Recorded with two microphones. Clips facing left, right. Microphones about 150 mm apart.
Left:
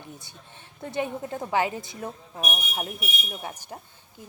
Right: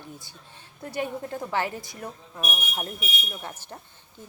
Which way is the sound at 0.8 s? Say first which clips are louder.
Left 1 dB; 20° left (ahead or behind).